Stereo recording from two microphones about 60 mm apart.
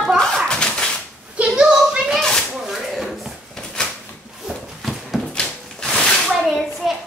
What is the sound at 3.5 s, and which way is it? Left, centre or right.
Drawer open or close, centre.